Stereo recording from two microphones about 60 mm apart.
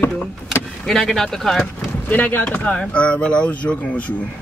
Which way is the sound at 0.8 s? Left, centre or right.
Centre.